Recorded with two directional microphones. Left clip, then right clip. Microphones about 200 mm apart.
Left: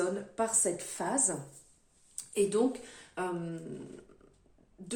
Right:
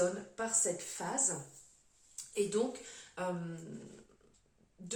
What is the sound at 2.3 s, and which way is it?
Speech, 50° left (ahead or behind).